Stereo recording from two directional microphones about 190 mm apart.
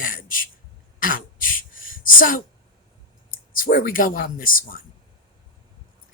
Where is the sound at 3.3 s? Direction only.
50° left (ahead or behind).